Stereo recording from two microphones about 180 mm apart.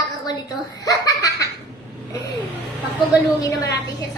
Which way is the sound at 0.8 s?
20° left (ahead or behind).